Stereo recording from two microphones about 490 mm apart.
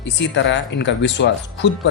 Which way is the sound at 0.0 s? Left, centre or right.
Left.